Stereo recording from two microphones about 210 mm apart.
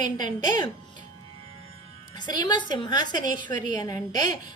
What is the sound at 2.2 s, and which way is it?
A woman's voice, 20° left (ahead or behind).